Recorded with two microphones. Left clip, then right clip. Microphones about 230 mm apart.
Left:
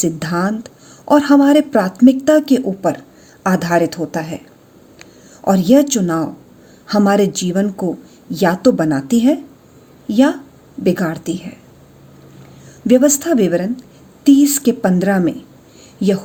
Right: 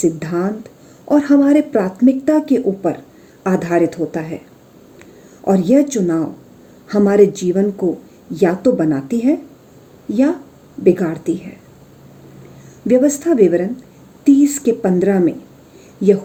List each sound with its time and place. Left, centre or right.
0.0 s speech: left
5.5 s speech: left
12.9 s speech: left